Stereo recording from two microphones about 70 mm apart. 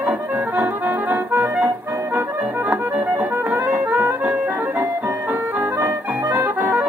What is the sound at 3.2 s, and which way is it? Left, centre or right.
Music, right.